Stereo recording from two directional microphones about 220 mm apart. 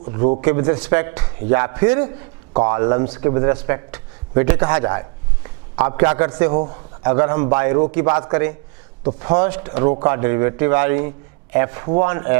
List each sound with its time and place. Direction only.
0.0 s speech: 25° right (ahead or behind)
4.9 s a sound: 15° right (ahead or behind)
6.1 s a man's voice: 10° right (ahead or behind)
9.3 s speech: 10° right (ahead or behind)